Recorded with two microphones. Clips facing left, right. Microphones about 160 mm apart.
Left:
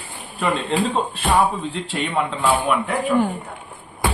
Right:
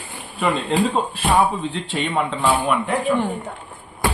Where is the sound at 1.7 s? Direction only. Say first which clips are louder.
Right 1 dB; centre (ahead or behind).